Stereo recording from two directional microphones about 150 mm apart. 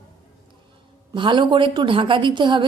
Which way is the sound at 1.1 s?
30° right (ahead or behind).